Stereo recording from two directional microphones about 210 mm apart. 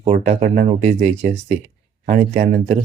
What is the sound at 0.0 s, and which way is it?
Speech, 30° right (ahead or behind).